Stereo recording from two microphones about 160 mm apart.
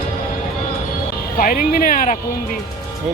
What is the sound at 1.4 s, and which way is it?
Speech, 60° left (ahead or behind).